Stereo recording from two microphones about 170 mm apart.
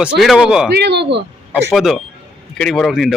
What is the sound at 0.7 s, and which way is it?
Speech, 80° right.